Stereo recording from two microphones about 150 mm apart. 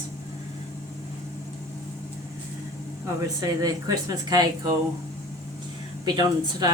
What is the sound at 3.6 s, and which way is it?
Speech, 25° right (ahead or behind).